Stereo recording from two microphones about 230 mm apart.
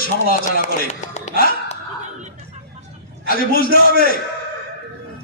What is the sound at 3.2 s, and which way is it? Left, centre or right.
Speech, left.